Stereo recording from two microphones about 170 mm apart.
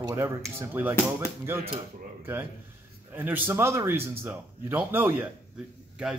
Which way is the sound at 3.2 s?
10° right (ahead or behind).